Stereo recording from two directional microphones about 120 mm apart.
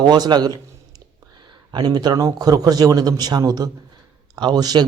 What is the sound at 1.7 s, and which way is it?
Speech, 35° right (ahead or behind).